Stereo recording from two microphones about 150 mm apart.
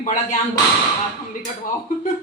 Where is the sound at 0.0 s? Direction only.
55° left (ahead or behind).